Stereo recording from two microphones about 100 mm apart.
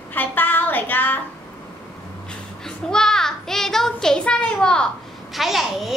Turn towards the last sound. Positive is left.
turn(degrees=0)  # may be behind; listen again after turning